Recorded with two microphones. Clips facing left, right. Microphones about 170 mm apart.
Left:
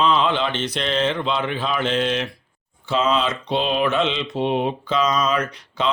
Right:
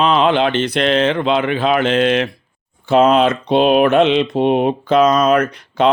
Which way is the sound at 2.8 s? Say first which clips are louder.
Right 9 dB; 55° right (ahead or behind).